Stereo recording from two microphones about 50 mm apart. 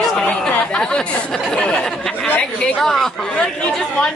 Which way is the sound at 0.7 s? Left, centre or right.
Centre.